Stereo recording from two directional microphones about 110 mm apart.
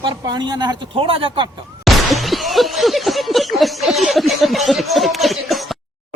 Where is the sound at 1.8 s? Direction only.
Centre (ahead or behind).